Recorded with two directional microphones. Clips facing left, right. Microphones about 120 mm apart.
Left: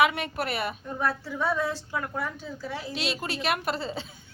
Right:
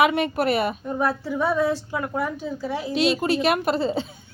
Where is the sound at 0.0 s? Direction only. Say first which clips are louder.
Right 5 dB; 20° right (ahead or behind).